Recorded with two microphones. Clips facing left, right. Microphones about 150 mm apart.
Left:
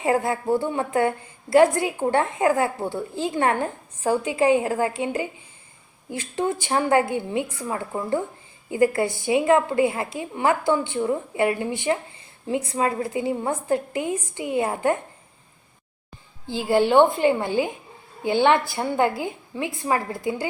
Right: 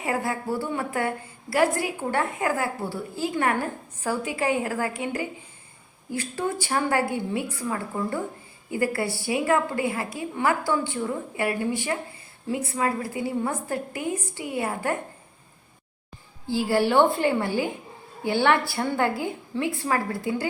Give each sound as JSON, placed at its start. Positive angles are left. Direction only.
{"t": 0.0, "sound": "a woman's voice", "side_deg": 25}
{"t": 16.5, "sound": "a woman's voice", "side_deg": 20}